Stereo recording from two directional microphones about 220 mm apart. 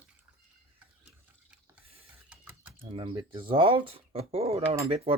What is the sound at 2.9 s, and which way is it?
Speech, 25° right (ahead or behind).